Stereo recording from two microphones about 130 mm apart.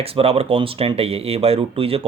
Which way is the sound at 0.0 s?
50° right (ahead or behind).